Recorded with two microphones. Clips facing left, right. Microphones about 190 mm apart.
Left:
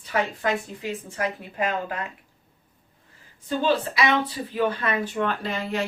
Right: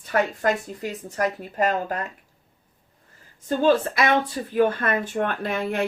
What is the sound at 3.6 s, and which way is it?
Speech, 50° right (ahead or behind).